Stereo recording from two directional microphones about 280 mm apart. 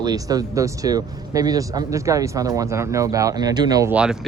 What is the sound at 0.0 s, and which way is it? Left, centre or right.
Speech, centre.